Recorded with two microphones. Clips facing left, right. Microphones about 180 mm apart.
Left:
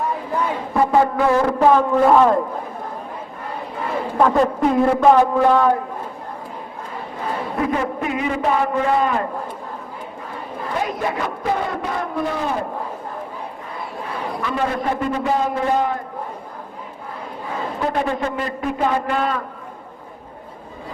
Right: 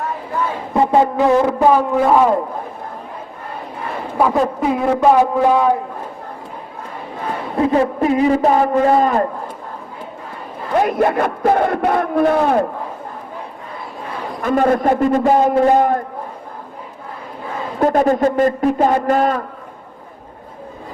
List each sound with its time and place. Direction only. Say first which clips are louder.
0.7 s a sound: right 3 dB; 20° right (ahead or behind)
1.5 s a man's voice: right 1 dB; 10° right (ahead or behind)
4.2 s a man's voice: even; 5° right (ahead or behind)
7.5 s a man's voice: right 8 dB; 30° right (ahead or behind)
10.8 s a man's voice: right 9 dB; 55° right (ahead or behind)
14.4 s a man's voice: right 8 dB; 50° right (ahead or behind)
17.7 s a man's voice: right 9 dB; 45° right (ahead or behind)